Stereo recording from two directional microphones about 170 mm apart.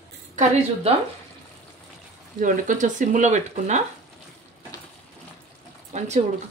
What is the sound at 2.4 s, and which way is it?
Speech, 50° right (ahead or behind).